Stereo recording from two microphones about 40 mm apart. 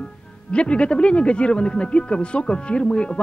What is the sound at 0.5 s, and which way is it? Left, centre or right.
Speech, left.